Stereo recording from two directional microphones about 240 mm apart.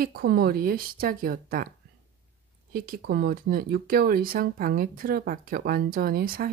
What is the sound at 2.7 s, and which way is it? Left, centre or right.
Speech, right.